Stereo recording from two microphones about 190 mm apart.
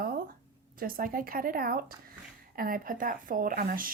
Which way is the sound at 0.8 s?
50° right (ahead or behind).